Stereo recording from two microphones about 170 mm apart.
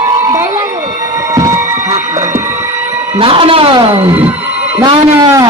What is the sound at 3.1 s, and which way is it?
Speech, 30° right (ahead or behind).